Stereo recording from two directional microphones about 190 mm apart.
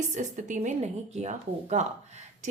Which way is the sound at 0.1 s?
40° right (ahead or behind).